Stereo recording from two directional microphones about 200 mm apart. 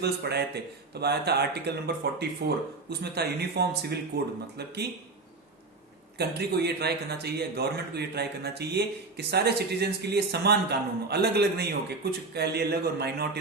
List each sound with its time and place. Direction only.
0.0 s a man's voice: 55° right (ahead or behind)
6.1 s a man's voice: 55° right (ahead or behind)